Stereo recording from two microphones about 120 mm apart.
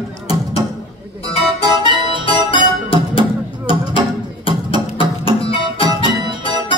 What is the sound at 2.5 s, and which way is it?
Music, 50° left (ahead or behind).